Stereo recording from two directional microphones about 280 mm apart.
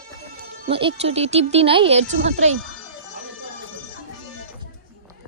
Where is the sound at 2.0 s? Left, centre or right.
Right.